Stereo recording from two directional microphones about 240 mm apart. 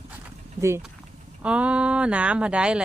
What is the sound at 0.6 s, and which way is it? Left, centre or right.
Speech, centre.